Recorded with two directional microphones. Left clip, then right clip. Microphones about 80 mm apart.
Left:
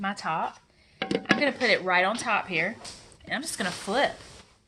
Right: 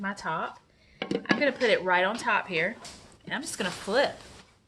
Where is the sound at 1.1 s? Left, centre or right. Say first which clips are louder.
Left 2 dB; left.